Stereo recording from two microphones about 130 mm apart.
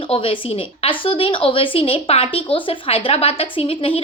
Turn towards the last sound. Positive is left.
turn(degrees=50)  # may be behind; listen again after turning